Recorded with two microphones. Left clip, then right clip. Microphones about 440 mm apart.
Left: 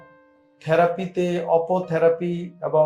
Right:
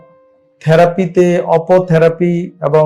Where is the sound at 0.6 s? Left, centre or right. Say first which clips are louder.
Right 9 dB; right.